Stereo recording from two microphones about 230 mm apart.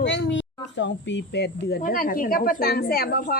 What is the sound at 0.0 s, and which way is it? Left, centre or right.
Speech, left.